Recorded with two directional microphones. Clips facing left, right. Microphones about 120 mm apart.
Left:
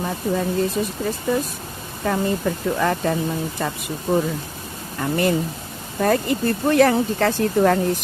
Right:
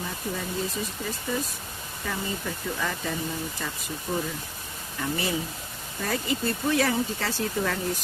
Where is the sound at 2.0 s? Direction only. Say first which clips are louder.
Left 11 dB; 55° left (ahead or behind).